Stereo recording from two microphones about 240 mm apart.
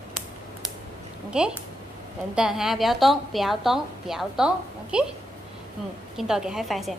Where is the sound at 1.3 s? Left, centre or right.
Centre.